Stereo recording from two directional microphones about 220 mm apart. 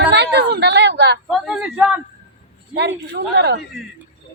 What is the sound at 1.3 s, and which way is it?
Speech, centre (ahead or behind).